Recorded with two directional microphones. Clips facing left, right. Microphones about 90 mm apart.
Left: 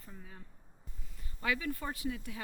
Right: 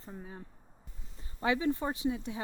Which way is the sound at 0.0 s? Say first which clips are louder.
Right 7 dB; 30° right (ahead or behind).